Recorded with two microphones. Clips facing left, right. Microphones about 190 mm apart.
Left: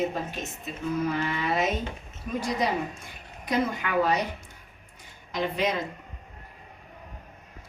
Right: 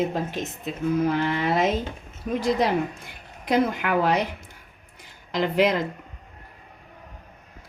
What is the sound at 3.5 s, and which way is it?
Speech, 85° right.